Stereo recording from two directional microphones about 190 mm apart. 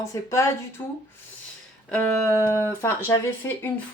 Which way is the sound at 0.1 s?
15° left (ahead or behind).